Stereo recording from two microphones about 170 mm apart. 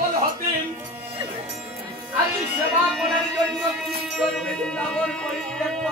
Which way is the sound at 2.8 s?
Centre (ahead or behind).